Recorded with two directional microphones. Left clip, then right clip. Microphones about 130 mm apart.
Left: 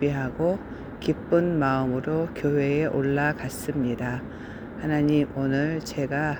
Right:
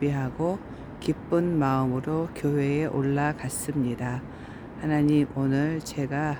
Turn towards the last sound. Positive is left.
turn(degrees=-30)  # may be behind; listen again after turning